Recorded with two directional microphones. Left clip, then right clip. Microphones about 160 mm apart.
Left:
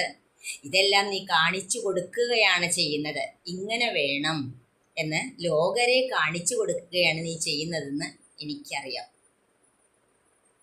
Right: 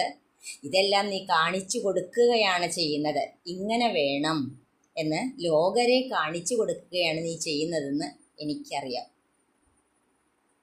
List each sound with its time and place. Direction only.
0.7 s a woman's voice: 65° right (ahead or behind)